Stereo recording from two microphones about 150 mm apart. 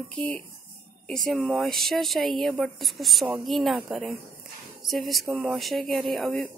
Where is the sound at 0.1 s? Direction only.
5° left (ahead or behind).